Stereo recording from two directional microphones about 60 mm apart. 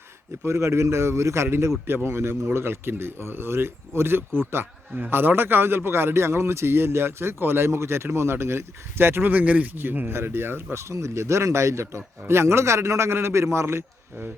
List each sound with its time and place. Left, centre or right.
0.4 s a man's voice: right